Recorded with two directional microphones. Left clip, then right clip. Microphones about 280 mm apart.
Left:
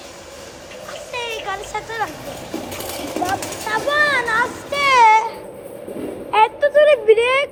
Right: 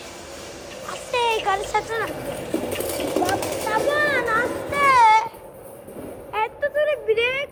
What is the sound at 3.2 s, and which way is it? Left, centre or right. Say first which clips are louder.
Vehicle: even; left.